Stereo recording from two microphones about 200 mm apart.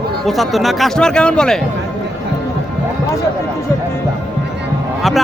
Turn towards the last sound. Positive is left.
turn(degrees=0)  # may be behind; listen again after turning